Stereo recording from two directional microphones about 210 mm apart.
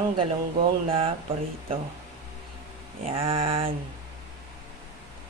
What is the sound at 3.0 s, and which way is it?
Speech, 25° right (ahead or behind).